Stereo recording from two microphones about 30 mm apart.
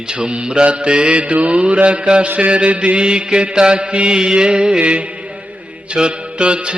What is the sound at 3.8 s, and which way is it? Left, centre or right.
Mantra, right.